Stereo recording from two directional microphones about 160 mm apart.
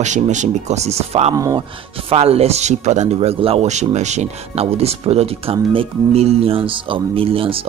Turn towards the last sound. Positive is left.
turn(degrees=-35)  # may be behind; listen again after turning